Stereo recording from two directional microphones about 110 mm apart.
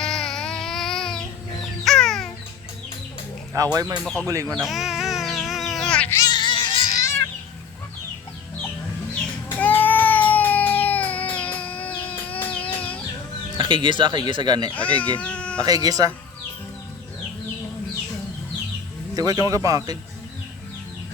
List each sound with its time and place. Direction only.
0.0 s a sound: 5° left (ahead or behind)
1.8 s music: 5° left (ahead or behind)
3.5 s speech: 35° right (ahead or behind)
4.0 s speech: 5° left (ahead or behind)
4.3 s speech: 30° right (ahead or behind)
4.5 s bird: centre (ahead or behind)
6.1 s music: 35° left (ahead or behind); by 6.9 s 50° left (ahead or behind)
9.6 s a sound: 15° left (ahead or behind)
11.9 s chicken: 15° left (ahead or behind)
13.6 s speech: 50° right (ahead or behind)
14.7 s speech: 15° left (ahead or behind)
15.6 s speech: 35° right (ahead or behind)
19.1 s speech: 30° right (ahead or behind)